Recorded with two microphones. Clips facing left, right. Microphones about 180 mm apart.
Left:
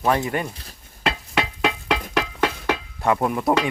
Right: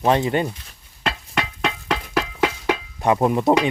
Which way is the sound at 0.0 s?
25° right (ahead or behind).